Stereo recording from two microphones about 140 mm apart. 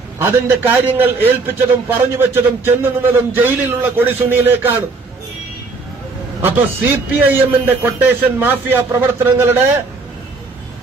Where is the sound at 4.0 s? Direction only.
15° right (ahead or behind).